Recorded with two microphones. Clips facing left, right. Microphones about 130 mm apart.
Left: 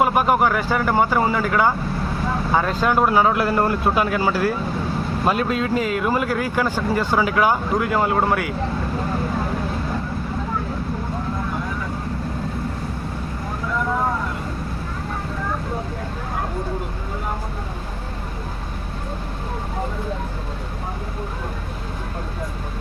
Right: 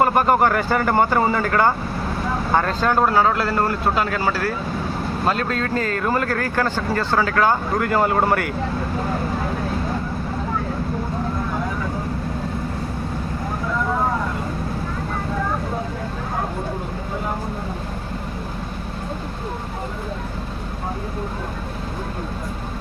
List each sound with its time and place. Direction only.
0.0 s speech: 5° left (ahead or behind)